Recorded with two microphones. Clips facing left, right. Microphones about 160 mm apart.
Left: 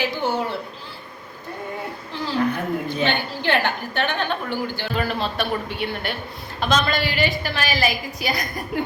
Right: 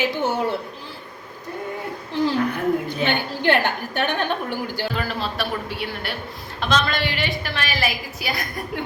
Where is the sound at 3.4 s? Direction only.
10° right (ahead or behind).